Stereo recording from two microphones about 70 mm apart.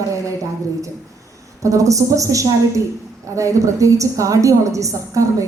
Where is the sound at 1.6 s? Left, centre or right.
Right.